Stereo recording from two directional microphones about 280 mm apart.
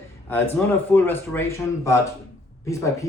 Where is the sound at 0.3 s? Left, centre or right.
Centre.